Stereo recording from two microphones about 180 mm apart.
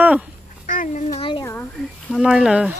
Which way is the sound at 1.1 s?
25° left (ahead or behind).